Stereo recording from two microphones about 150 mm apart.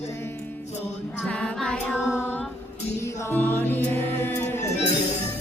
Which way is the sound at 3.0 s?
15° left (ahead or behind).